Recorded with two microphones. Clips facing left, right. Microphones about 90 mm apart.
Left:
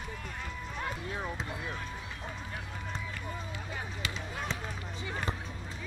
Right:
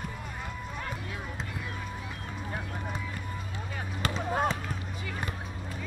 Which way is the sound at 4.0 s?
45° right (ahead or behind).